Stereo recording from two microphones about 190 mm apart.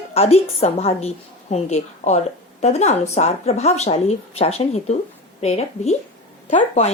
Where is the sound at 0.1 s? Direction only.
30° left (ahead or behind).